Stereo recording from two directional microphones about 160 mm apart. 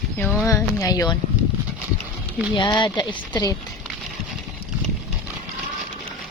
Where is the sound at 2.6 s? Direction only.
30° left (ahead or behind).